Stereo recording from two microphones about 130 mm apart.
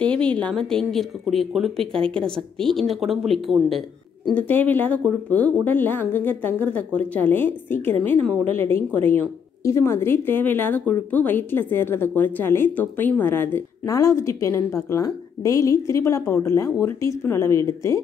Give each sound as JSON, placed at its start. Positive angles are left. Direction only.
{"t": 0.0, "sound": "speech", "side_deg": 10}
{"t": 4.3, "sound": "a woman's voice", "side_deg": 15}